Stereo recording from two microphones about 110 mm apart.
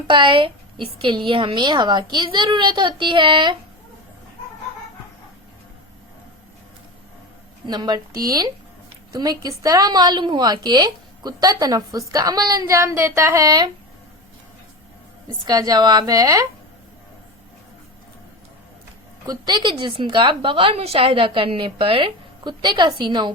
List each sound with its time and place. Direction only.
0.1 s a woman's voice: 50° right (ahead or behind)
7.7 s a woman's voice: 40° right (ahead or behind)
12.6 s speech: 25° right (ahead or behind)
15.4 s a woman's voice: 35° right (ahead or behind)
19.2 s a woman's voice: 40° right (ahead or behind)